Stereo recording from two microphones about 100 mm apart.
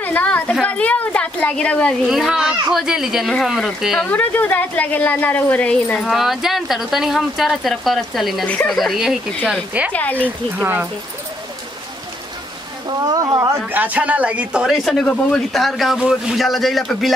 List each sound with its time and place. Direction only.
0.0 s a woman's voice: 15° left (ahead or behind)
2.0 s a woman's voice: 5° right (ahead or behind)
4.0 s a woman's voice: 15° left (ahead or behind); by 9.2 s 5° right (ahead or behind)
9.9 s a woman's voice: 15° left (ahead or behind)
10.6 s speech: 20° right (ahead or behind)
12.8 s speech: 40° right (ahead or behind)
13.7 s a woman's voice: 15° right (ahead or behind); by 17.1 s centre (ahead or behind)